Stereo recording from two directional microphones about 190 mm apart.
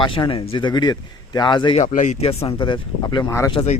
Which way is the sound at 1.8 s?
40° left (ahead or behind).